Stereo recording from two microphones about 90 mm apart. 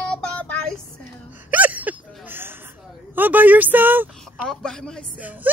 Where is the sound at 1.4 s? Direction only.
15° right (ahead or behind).